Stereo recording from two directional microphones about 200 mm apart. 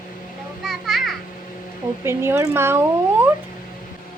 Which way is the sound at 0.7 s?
Centre (ahead or behind).